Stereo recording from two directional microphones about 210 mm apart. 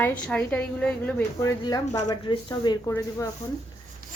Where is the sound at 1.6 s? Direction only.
20° left (ahead or behind).